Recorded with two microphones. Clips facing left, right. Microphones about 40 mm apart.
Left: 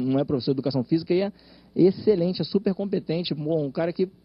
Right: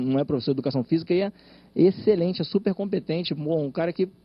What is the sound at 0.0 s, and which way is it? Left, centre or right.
A man's voice, right.